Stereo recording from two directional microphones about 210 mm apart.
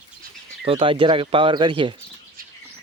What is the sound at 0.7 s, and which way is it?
Speech, 25° right (ahead or behind).